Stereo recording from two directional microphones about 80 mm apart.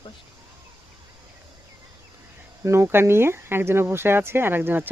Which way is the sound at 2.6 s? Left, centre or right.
Right.